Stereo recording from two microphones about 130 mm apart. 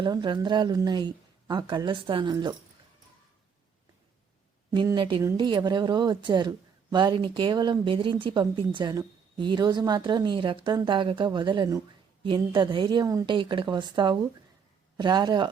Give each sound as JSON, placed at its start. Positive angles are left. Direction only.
{"t": 0.0, "sound": "speech", "side_deg": -35}
{"t": 2.3, "sound": "speech", "side_deg": -30}
{"t": 4.7, "sound": "speech", "side_deg": -35}